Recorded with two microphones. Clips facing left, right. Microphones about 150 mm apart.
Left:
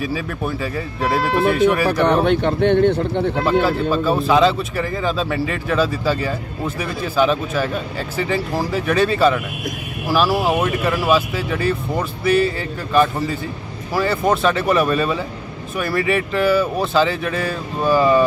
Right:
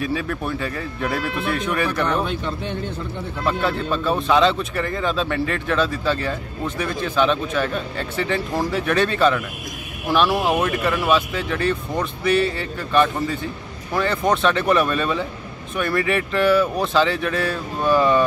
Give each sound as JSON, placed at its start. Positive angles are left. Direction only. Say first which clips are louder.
{"t": 0.0, "sound": "speech", "louder": "left 1 dB", "side_deg": 5}
{"t": 2.0, "sound": "speech", "louder": "left 7 dB", "side_deg": 65}
{"t": 3.6, "sound": "speech", "louder": "left 4 dB", "side_deg": 5}